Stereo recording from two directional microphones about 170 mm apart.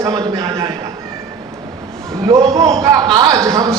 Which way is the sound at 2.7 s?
20° right (ahead or behind).